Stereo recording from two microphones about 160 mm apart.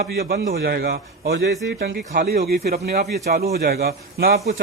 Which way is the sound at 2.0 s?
60° right (ahead or behind).